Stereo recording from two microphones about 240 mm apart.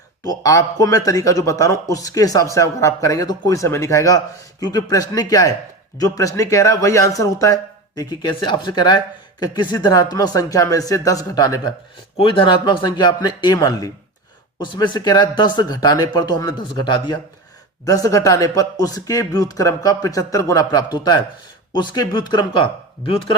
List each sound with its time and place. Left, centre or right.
0.3 s speech: centre